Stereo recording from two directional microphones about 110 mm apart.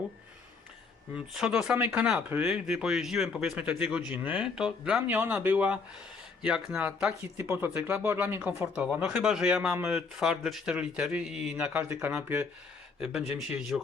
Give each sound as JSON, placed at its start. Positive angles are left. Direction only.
{"t": 1.1, "sound": "speech", "side_deg": -5}
{"t": 2.5, "sound": "speech", "side_deg": -5}